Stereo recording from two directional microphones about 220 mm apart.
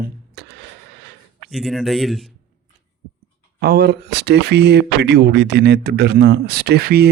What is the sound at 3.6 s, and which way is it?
Speech, 45° right (ahead or behind).